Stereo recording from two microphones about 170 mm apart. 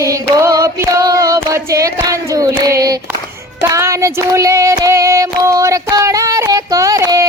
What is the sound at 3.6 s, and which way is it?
Female singing, 15° right (ahead or behind).